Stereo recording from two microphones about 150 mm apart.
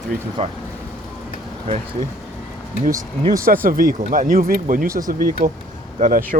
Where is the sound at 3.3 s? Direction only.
70° right (ahead or behind).